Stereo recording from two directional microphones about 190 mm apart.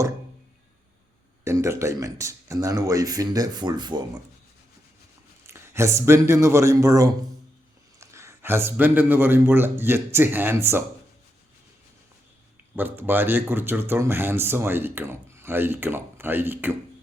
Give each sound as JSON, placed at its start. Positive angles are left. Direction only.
{"t": 1.5, "sound": "speech", "side_deg": -15}
{"t": 5.5, "sound": "speech", "side_deg": -15}
{"t": 12.7, "sound": "speech", "side_deg": -10}